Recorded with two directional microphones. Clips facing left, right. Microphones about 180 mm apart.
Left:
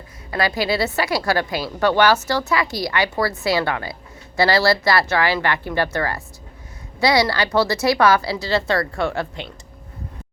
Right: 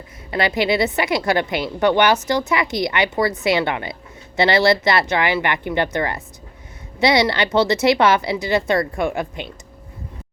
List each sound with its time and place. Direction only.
0.3 s speech: 25° right (ahead or behind)